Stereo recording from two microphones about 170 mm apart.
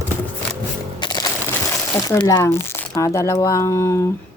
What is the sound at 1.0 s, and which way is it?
Music, 25° left (ahead or behind).